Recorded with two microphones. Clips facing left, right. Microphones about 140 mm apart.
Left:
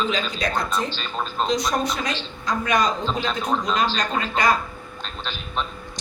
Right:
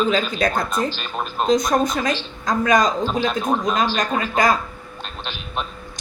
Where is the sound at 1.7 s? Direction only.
50° right (ahead or behind).